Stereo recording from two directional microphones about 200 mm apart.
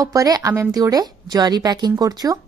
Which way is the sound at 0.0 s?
15° right (ahead or behind).